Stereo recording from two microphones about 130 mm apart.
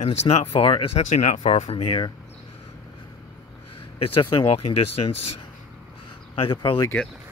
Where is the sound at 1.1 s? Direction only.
65° left (ahead or behind); by 2.1 s 45° left (ahead or behind).